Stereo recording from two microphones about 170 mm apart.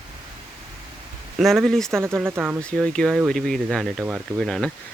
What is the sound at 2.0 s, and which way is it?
Speech, 15° right (ahead or behind).